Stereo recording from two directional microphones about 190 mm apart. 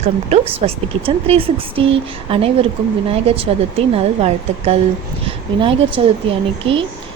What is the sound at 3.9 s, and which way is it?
Speech, 30° right (ahead or behind).